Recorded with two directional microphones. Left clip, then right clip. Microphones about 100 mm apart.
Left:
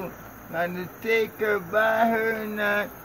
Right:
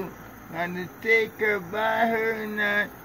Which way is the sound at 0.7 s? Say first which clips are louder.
Even; 50° left (ahead or behind).